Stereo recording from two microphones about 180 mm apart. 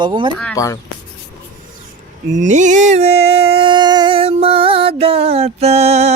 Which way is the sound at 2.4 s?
45° right (ahead or behind).